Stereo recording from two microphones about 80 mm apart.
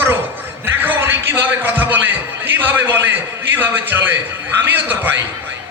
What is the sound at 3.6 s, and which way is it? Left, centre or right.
Speech, right.